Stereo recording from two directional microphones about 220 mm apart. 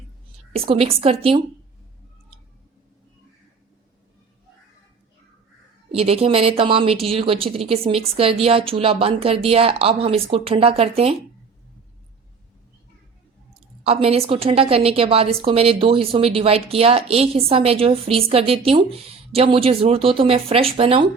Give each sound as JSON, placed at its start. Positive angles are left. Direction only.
{"t": 0.5, "sound": "a woman's voice", "side_deg": -25}
{"t": 5.9, "sound": "a woman's voice", "side_deg": -25}
{"t": 13.8, "sound": "a woman's voice", "side_deg": -25}